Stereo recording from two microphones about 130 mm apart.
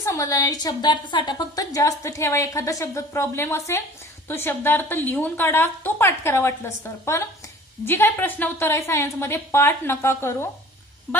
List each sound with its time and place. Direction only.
0.0 s a woman's voice: 25° left (ahead or behind)